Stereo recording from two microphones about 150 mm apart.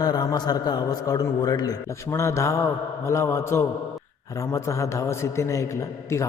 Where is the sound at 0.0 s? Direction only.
25° left (ahead or behind).